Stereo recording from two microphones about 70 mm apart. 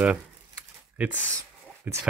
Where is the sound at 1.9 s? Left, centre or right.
Right.